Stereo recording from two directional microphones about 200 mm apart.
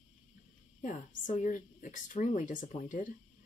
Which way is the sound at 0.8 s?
40° left (ahead or behind).